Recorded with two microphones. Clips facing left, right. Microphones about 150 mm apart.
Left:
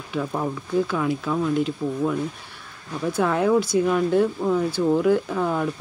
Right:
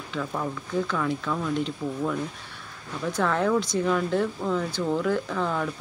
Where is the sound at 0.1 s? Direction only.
25° left (ahead or behind).